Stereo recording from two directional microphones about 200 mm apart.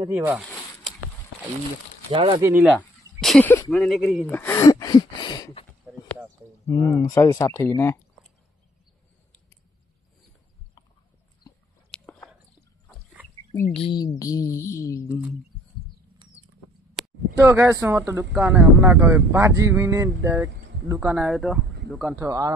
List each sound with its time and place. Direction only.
0.0 s speech: 15° right (ahead or behind)
2.0 s speech: 25° right (ahead or behind)
2.5 s speech: 10° right (ahead or behind)
3.2 s speech: 5° left (ahead or behind)
3.7 s a sound: centre (ahead or behind); by 5.7 s 25° left (ahead or behind)
5.9 s a sound: 10° right (ahead or behind)
6.7 s speech: 15° left (ahead or behind)
11.9 s biting: 5° left (ahead or behind)
13.7 s speech: 25° left (ahead or behind)
17.4 s speech: 10° right (ahead or behind)
22.1 s speech: 15° right (ahead or behind)